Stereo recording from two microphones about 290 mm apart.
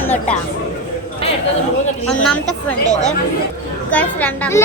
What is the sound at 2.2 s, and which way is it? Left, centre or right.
Speech, centre.